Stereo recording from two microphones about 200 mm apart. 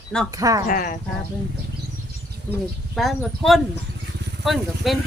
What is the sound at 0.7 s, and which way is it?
Speech, 45° left (ahead or behind).